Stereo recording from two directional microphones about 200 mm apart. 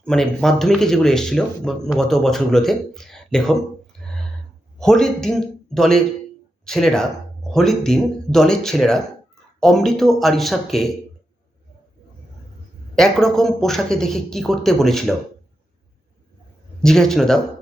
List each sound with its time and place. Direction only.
0.0 s speech: centre (ahead or behind)
4.8 s a man's voice: 5° left (ahead or behind)
13.0 s speech: centre (ahead or behind)
16.8 s speech: centre (ahead or behind)